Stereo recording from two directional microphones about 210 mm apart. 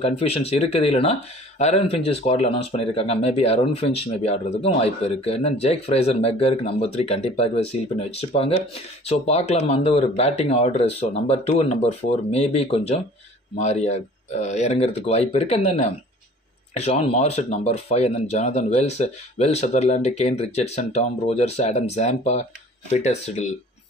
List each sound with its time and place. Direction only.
0.0 s speech: 30° left (ahead or behind)
9.0 s speech: 30° left (ahead or behind)